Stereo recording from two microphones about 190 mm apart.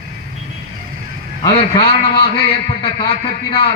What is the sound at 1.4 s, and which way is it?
A man's voice, 25° left (ahead or behind).